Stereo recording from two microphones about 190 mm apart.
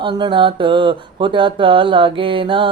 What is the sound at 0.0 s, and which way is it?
Mantra, 25° right (ahead or behind).